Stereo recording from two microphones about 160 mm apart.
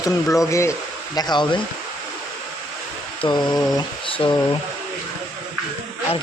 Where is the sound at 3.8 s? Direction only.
30° left (ahead or behind).